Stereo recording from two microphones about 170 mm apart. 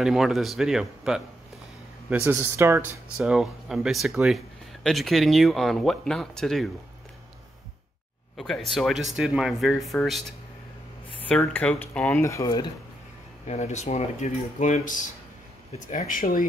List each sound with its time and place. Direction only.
0.0 s speech: centre (ahead or behind)
3.2 s speech: 5° right (ahead or behind)
8.4 s speech: centre (ahead or behind); by 12.6 s 20° left (ahead or behind)
13.5 s speech: 40° left (ahead or behind)